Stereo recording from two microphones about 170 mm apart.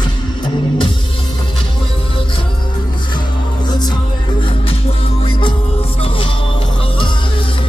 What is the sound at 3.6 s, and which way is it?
Music, 25° left (ahead or behind).